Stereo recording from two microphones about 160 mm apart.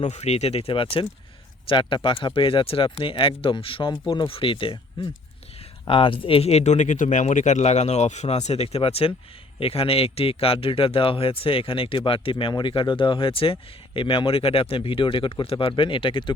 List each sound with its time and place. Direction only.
0.1 s speech: 40° left (ahead or behind)